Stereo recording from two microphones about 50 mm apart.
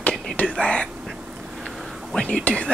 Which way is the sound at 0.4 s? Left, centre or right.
Left.